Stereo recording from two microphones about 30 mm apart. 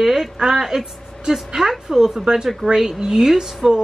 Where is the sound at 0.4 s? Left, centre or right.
Centre.